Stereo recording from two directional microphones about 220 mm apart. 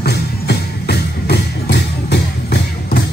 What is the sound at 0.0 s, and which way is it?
Music, 50° left (ahead or behind).